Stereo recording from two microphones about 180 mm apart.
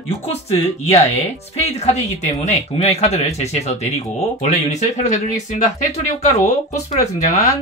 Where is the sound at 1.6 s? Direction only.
40° left (ahead or behind).